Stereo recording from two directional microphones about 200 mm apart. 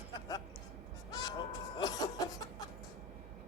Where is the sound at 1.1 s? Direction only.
20° left (ahead or behind).